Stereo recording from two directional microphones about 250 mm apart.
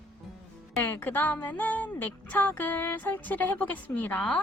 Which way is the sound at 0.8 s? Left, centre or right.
Centre.